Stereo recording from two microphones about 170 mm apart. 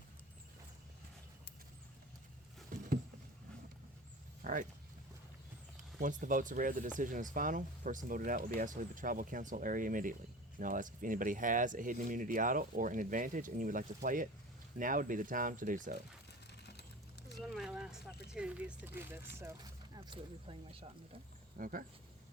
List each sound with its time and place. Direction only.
2.7 s a sound: 50° right (ahead or behind)
4.4 s a sound: 50° right (ahead or behind)
6.0 s speech: 50° right (ahead or behind)
17.3 s speech: centre (ahead or behind)
20.0 s speech: 35° right (ahead or behind)
21.6 s speech: 55° right (ahead or behind)